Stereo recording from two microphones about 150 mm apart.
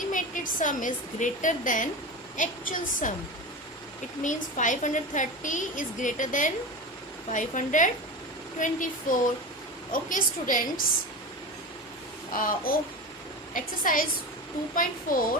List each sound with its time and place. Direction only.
0.1 s a woman's voice: 60° left (ahead or behind)
4.2 s a woman's voice: 55° left (ahead or behind)
12.3 s a woman's voice: 70° left (ahead or behind)